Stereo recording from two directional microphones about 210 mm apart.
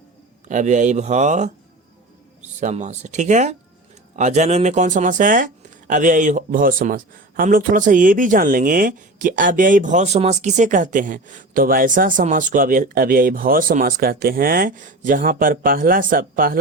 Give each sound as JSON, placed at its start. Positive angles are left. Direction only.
{"t": 0.4, "sound": "speech", "side_deg": -35}
{"t": 2.6, "sound": "speech", "side_deg": -35}